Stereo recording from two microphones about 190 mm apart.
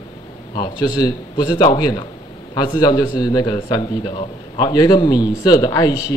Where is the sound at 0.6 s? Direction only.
20° left (ahead or behind).